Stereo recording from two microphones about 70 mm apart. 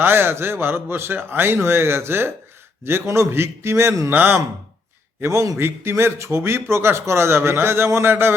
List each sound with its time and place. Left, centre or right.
0.0 s a man's voice: right
4.1 s speech: right
5.2 s a man's voice: right